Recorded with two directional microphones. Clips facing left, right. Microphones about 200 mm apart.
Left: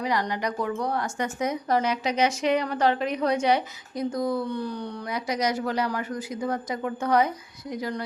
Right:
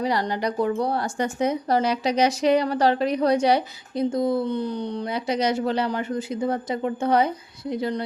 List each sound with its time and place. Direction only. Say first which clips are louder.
0.0 s speech: right 3 dB; 30° right (ahead or behind)